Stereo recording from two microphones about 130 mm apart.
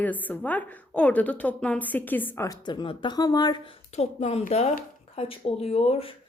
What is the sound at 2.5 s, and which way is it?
Speech, 35° left (ahead or behind).